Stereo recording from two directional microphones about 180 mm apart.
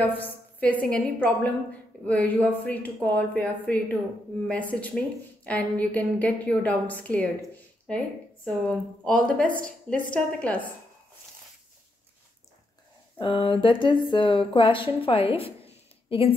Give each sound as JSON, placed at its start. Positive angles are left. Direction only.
{"t": 0.0, "sound": "a woman's voice", "side_deg": 10}
{"t": 8.6, "sound": "a woman's voice", "side_deg": 5}
{"t": 13.2, "sound": "a woman's voice", "side_deg": 25}